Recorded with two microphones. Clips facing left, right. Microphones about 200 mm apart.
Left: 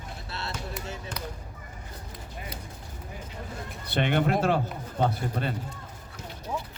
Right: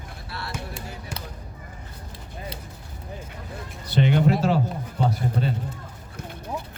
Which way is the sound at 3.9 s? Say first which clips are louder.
Right 4 dB; 60° left (ahead or behind).